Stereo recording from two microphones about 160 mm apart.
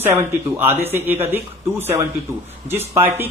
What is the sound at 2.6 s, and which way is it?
Speech, 15° right (ahead or behind).